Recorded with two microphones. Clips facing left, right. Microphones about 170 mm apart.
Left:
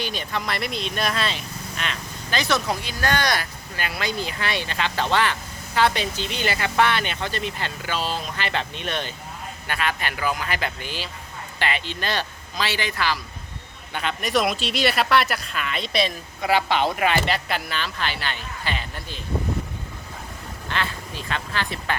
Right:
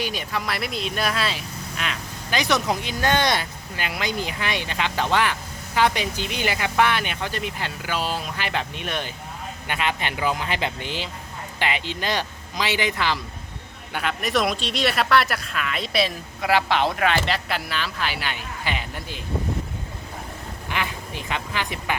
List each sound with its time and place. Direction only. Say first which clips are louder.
0.0 s speech: right 1 dB; 10° right (ahead or behind)
2.4 s speech: right 1 dB; 20° right (ahead or behind)
13.9 s speech: even; 5° right (ahead or behind)
20.7 s speech: even; 15° right (ahead or behind)